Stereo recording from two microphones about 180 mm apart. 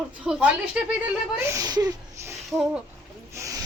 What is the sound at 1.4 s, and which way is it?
Speech, 15° right (ahead or behind).